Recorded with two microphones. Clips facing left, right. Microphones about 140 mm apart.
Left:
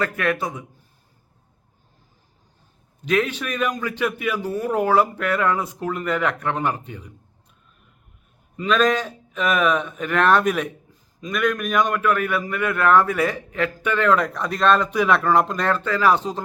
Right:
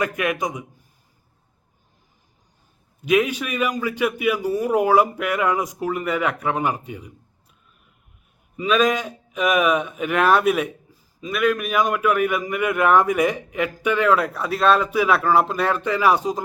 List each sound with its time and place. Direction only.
0.0 s speech: 15° right (ahead or behind)
3.0 s speech: 10° right (ahead or behind)
8.5 s speech: 10° right (ahead or behind)